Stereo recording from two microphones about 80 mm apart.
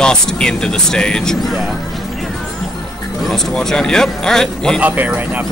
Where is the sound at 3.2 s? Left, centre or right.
Centre.